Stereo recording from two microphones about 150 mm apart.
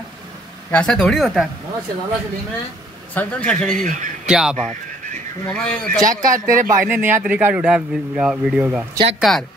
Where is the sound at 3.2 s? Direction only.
10° left (ahead or behind).